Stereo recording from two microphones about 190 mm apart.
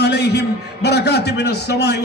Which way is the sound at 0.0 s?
60° left (ahead or behind).